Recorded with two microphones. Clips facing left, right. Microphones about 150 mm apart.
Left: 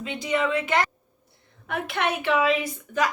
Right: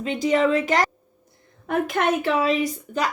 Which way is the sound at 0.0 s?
45° right (ahead or behind).